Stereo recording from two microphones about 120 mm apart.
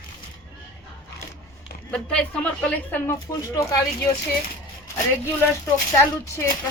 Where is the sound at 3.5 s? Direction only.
30° left (ahead or behind).